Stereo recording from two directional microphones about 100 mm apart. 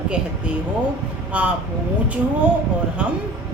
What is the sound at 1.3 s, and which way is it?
Speech, 15° right (ahead or behind).